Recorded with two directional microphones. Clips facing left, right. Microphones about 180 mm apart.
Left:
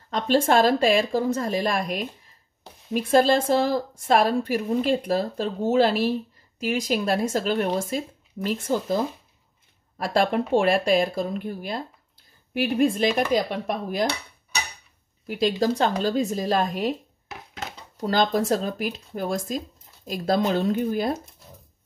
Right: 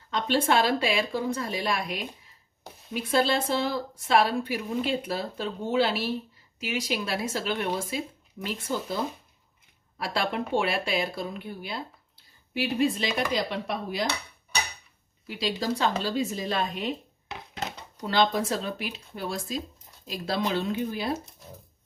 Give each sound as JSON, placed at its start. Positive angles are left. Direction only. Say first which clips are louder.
{"t": 0.1, "sound": "speech", "louder": "left 4 dB", "side_deg": 45}
{"t": 15.2, "sound": "speech", "louder": "left 7 dB", "side_deg": 50}
{"t": 18.0, "sound": "speech", "louder": "left 3 dB", "side_deg": 40}